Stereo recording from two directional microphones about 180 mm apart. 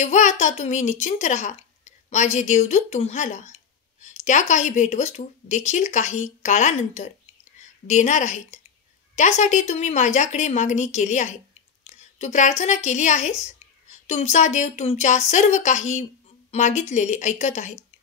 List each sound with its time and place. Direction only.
0.0 s a child's voice: 40° left (ahead or behind)